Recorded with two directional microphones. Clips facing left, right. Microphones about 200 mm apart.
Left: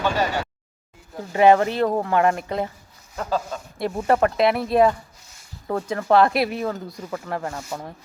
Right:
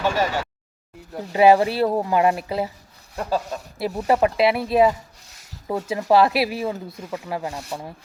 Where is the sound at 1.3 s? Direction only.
10° right (ahead or behind).